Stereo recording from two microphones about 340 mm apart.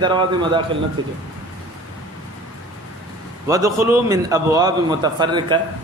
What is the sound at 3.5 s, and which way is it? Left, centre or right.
Speech, centre.